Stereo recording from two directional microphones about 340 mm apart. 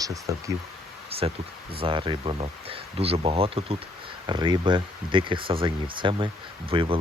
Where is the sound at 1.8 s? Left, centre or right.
Centre.